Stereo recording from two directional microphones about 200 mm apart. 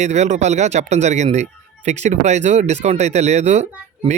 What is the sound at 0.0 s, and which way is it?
Speech, 35° right (ahead or behind).